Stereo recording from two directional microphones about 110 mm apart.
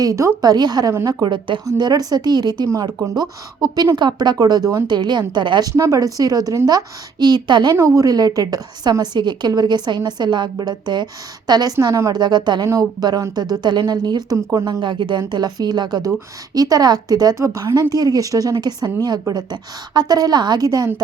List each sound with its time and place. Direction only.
0.0 s a woman's voice: 30° right (ahead or behind); by 1.6 s 45° right (ahead or behind)
1.6 s a woman's voice: 35° right (ahead or behind)
2.6 s a woman's voice: 30° right (ahead or behind)
5.7 s a woman's voice: 30° right (ahead or behind)
7.8 s a woman's voice: 30° right (ahead or behind)
12.6 s a woman's voice: 30° right (ahead or behind)